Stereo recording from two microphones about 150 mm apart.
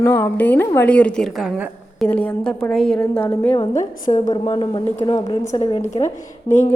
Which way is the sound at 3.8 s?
55° left (ahead or behind).